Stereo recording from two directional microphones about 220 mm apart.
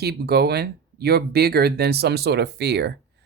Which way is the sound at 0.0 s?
45° right (ahead or behind).